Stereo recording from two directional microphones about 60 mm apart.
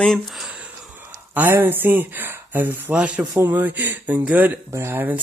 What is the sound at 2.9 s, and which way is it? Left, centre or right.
Speech, right.